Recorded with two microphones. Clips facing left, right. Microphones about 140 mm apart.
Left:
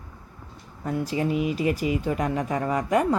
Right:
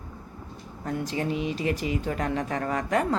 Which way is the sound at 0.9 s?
10° left (ahead or behind).